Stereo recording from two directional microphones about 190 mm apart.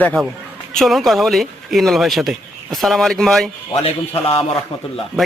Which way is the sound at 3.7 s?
30° left (ahead or behind).